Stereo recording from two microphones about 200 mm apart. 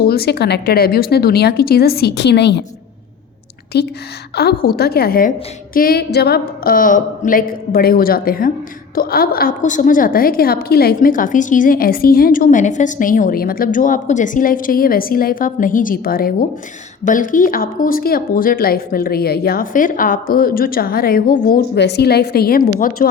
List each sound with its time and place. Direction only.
0.0 s a woman's voice: 50° left (ahead or behind)
3.7 s a woman's voice: 55° left (ahead or behind)